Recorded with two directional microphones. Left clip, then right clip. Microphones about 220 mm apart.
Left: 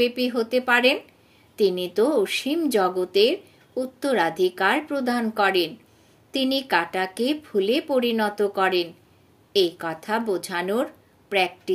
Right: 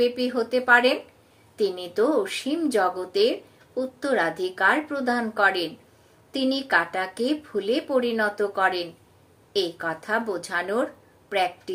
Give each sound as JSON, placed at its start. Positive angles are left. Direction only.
{"t": 0.0, "sound": "speech", "side_deg": 40}